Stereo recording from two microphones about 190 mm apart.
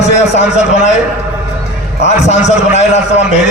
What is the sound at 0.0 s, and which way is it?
Speech, 35° left (ahead or behind).